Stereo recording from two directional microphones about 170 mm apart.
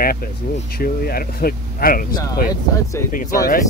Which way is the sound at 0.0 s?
60° left (ahead or behind).